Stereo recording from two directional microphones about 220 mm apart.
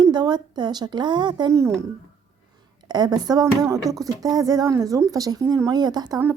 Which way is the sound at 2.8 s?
20° right (ahead or behind).